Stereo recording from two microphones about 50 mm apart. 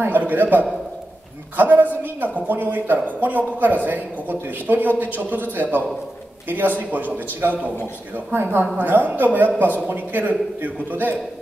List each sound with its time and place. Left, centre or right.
0.0 s speech: right
6.8 s a woman's voice: right